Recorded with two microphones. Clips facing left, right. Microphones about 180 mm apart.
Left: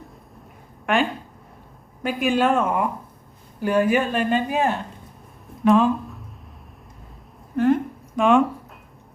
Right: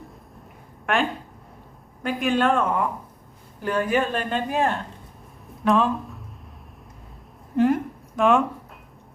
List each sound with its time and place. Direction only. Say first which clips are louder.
0.9 s speech: left 3 dB; centre (ahead or behind)
2.0 s a woman's voice: left 1 dB; 5° left (ahead or behind)
7.5 s a sound: left 1 dB; 15° right (ahead or behind)
8.1 s speech: left 1 dB; centre (ahead or behind)